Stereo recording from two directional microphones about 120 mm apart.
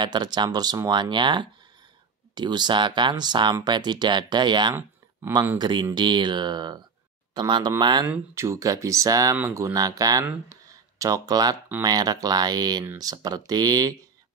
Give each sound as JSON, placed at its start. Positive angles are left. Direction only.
{"t": 0.0, "sound": "speech", "side_deg": -40}
{"t": 8.4, "sound": "speech", "side_deg": -25}
{"t": 10.5, "sound": "a sound", "side_deg": -25}
{"t": 11.8, "sound": "speech", "side_deg": -35}